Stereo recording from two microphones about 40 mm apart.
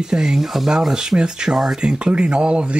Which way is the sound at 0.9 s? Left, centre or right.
Centre.